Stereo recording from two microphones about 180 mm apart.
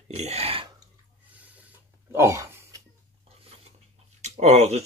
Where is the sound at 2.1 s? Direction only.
15° right (ahead or behind).